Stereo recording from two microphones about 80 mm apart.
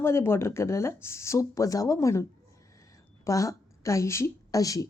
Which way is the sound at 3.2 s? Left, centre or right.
Left.